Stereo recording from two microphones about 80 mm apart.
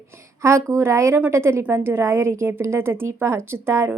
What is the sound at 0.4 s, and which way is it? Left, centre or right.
A woman's voice, right.